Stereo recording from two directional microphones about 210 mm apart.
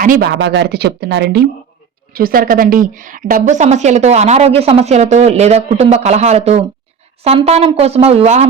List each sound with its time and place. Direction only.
0.0 s a woman's voice: 45° right (ahead or behind)